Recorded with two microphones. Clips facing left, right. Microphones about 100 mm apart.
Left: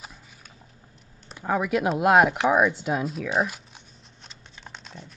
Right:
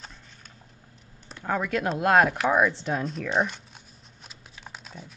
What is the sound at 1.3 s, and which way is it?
Speech, 10° left (ahead or behind).